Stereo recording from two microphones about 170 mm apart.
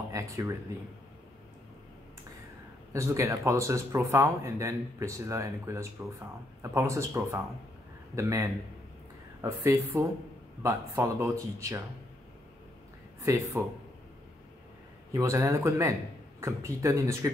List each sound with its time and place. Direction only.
0.1 s a sound: 15° right (ahead or behind)
2.9 s speech: 15° right (ahead or behind)
13.2 s speech: 15° right (ahead or behind)
15.1 s speech: 15° right (ahead or behind)